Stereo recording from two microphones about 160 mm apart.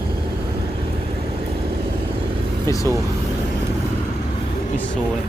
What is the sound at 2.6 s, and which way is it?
Vehicle, 20° left (ahead or behind).